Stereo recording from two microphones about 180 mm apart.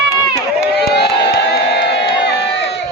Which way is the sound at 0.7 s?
65° left (ahead or behind).